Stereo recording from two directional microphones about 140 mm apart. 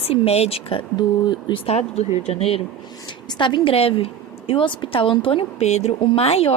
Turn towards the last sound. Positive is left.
turn(degrees=45)  # may be behind; listen again after turning